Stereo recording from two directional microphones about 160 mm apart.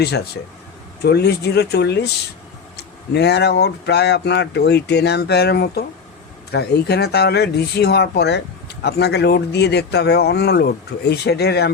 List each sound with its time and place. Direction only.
1.0 s speech: 90° left